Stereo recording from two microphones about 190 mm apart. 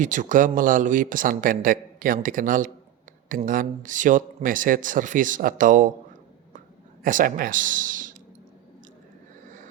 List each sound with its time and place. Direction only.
0.0 s speech: 40° right (ahead or behind)
7.0 s speech: 45° right (ahead or behind)